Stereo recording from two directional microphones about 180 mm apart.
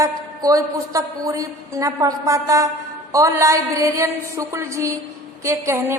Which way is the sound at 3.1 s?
15° right (ahead or behind).